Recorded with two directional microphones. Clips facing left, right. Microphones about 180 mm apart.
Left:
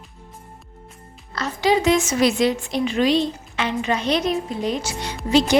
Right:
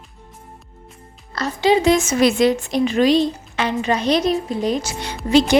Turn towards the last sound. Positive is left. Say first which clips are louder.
# right 2 dB
turn(degrees=-60)  # may be behind; listen again after turning